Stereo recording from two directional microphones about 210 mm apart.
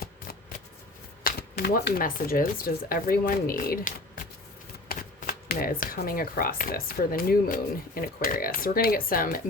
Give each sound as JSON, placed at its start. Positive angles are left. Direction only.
{"t": 1.2, "sound": "speech", "side_deg": 45}